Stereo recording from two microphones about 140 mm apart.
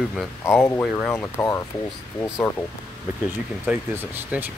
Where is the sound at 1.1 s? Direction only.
20° left (ahead or behind).